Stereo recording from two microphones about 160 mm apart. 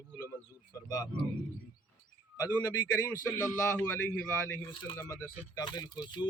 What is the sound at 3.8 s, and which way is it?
A man's voice, 10° left (ahead or behind).